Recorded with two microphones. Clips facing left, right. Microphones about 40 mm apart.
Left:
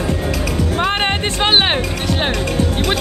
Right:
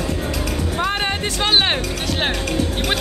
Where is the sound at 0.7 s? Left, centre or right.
Left; by 2.0 s centre.